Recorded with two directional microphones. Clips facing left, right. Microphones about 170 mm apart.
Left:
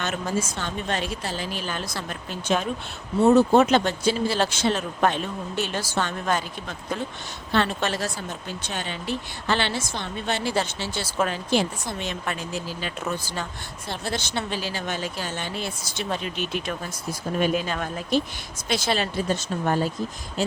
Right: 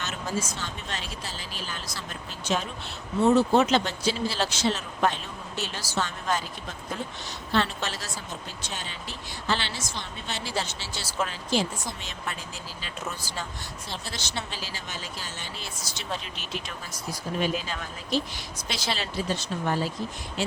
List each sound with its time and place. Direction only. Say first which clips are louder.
0.0 s a woman's voice: left 5 dB; 55° left (ahead or behind)
7.5 s a woman's voice: left 4 dB; 55° left (ahead or behind)